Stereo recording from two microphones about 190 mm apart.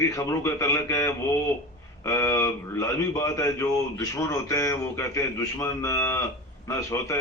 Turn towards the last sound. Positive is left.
turn(degrees=15)  # may be behind; listen again after turning